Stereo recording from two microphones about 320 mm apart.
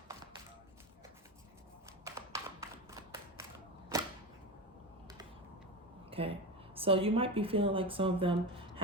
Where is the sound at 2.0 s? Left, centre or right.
Centre.